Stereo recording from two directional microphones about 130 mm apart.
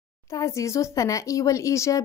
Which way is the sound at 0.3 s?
25° left (ahead or behind).